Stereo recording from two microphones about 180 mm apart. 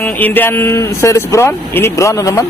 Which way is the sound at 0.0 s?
10° left (ahead or behind).